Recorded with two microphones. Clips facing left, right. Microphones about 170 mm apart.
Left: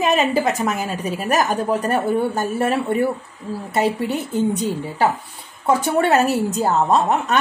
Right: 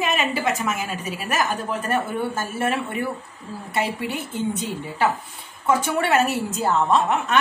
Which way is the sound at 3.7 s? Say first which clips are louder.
Left 5 dB; 40° left (ahead or behind).